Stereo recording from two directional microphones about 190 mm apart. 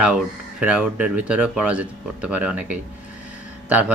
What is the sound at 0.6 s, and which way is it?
Speech, 5° right (ahead or behind).